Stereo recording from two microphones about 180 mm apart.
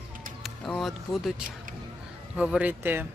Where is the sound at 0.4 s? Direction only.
Centre (ahead or behind).